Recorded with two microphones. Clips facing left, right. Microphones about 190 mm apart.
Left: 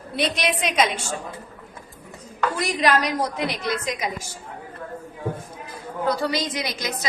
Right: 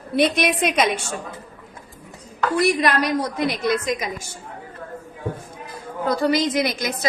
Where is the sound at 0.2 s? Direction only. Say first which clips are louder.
Right 5 dB; 55° right (ahead or behind).